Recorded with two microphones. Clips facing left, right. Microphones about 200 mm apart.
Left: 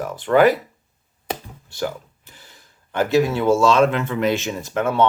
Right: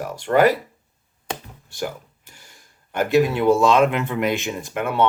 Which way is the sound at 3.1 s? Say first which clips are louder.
Right 1 dB; 15° right (ahead or behind).